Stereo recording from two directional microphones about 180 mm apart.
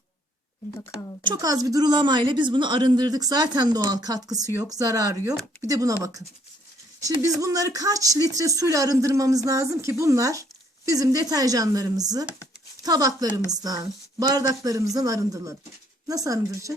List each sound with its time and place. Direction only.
1.2 s speech: 20° right (ahead or behind)